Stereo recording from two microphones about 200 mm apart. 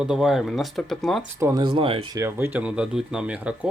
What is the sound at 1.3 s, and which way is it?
Speech, 15° right (ahead or behind).